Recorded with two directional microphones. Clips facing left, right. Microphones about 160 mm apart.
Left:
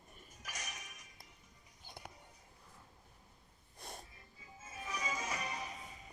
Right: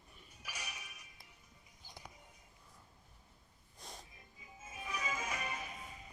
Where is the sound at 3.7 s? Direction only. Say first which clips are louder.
Left 3 dB; 60° left (ahead or behind).